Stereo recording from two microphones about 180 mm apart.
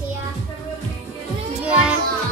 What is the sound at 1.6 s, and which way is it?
Music, 5° right (ahead or behind).